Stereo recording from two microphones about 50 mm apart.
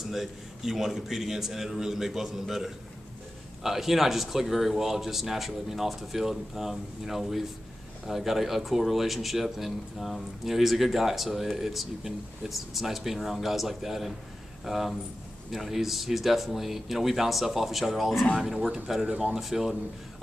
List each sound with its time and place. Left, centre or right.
0.1 s a man's voice: centre
19.0 s a man's voice: centre
19.4 s speech: centre